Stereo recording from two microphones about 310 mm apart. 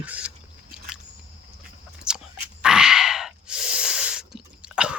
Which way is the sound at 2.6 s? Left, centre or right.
Centre.